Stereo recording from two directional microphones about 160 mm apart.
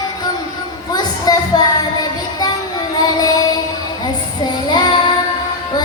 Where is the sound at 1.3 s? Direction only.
25° left (ahead or behind).